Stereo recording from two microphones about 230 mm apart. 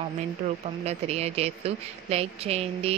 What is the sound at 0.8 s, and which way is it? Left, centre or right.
Speech, right.